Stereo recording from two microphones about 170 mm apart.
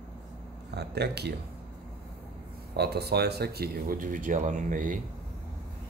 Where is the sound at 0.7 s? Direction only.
75° right (ahead or behind).